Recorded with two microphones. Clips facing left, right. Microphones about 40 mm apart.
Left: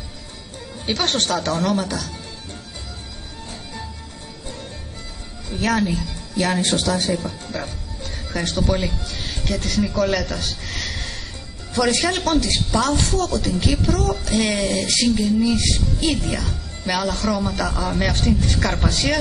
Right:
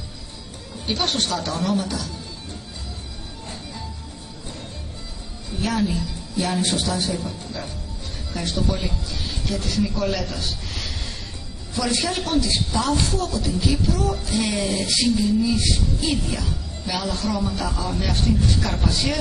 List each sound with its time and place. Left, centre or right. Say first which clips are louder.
0.8 s speech: left 2 dB; left
5.6 s a woman's voice: left 3 dB; left
7.2 s speech: left 3 dB; left
8.3 s a man's voice: left 3 dB; left